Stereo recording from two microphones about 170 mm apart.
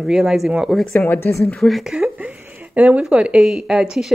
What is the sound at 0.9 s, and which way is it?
Speech, 15° left (ahead or behind).